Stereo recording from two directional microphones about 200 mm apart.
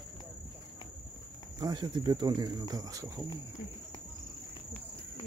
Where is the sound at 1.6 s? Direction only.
20° right (ahead or behind).